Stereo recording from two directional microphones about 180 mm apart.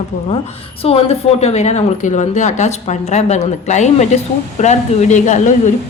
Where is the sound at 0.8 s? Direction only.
35° left (ahead or behind).